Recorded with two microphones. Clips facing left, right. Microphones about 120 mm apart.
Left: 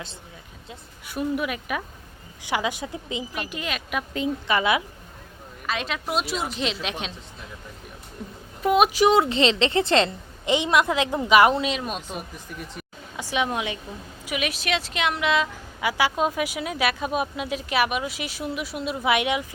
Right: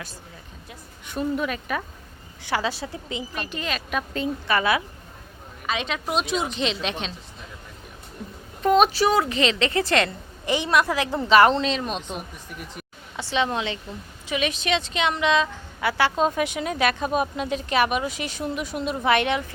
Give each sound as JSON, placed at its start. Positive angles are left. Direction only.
{"t": 1.0, "sound": "a woman's voice", "side_deg": 10}
{"t": 5.6, "sound": "a woman's voice", "side_deg": 0}
{"t": 8.6, "sound": "a woman's voice", "side_deg": 10}